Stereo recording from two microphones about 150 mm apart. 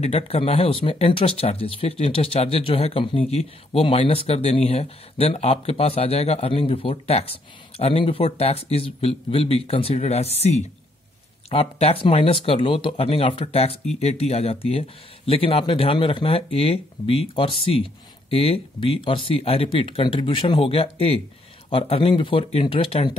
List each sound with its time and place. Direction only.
0.0 s speech: 40° left (ahead or behind)